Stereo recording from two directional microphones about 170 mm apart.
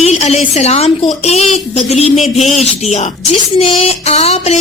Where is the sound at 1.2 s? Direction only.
40° left (ahead or behind).